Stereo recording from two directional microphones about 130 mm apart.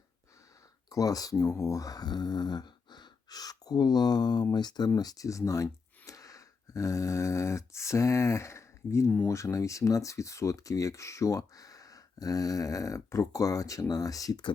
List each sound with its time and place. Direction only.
0.9 s speech: 25° left (ahead or behind)
6.1 s a sound: 25° left (ahead or behind)
9.3 s speech: 25° left (ahead or behind)